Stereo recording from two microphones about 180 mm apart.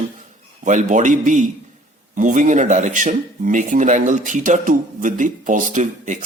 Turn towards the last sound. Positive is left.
turn(degrees=-45)  # may be behind; listen again after turning